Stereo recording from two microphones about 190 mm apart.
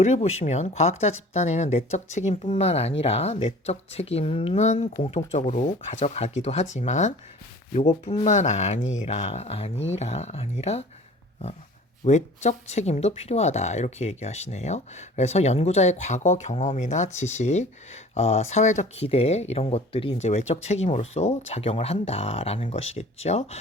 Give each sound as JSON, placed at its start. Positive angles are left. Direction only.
{"t": 0.0, "sound": "speech", "side_deg": 35}
{"t": 12.0, "sound": "speech", "side_deg": 40}